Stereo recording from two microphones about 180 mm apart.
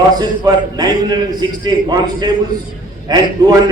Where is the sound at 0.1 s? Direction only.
20° right (ahead or behind).